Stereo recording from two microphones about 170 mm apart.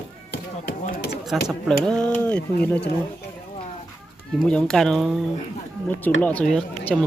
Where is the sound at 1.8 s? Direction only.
5° left (ahead or behind).